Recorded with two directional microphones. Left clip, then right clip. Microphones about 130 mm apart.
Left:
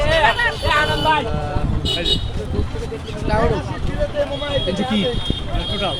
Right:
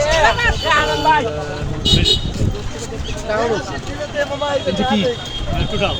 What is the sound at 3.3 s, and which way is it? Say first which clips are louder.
Speech: right 1 dB; 30° left (ahead or behind).